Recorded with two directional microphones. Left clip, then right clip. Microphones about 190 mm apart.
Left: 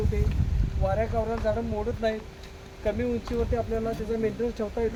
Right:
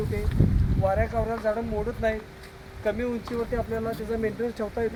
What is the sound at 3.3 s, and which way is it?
Speech, 5° right (ahead or behind).